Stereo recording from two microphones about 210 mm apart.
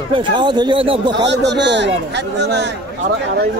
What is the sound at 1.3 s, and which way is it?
A man's voice, 55° right (ahead or behind).